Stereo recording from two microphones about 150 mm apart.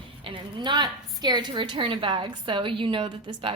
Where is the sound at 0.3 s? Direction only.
30° right (ahead or behind).